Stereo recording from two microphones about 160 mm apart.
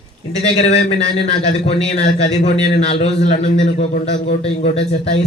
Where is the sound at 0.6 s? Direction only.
40° left (ahead or behind).